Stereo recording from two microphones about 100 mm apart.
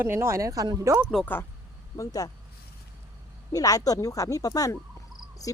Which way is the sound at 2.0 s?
35° left (ahead or behind).